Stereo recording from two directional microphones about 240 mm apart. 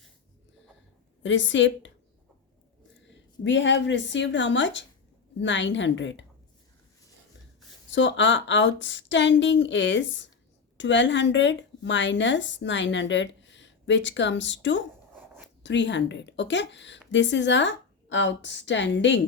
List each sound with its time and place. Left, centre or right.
1.2 s a woman's voice: left
3.4 s a woman's voice: left
7.9 s a woman's voice: left